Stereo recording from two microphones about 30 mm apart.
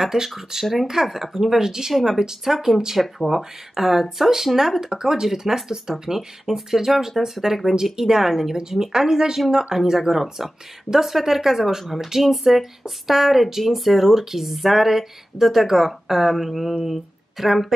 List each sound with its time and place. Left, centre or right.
0.0 s speech: centre